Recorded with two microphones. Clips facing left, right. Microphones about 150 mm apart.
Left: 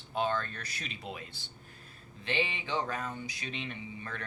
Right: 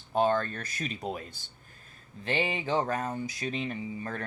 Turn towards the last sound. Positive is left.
turn(degrees=-40)  # may be behind; listen again after turning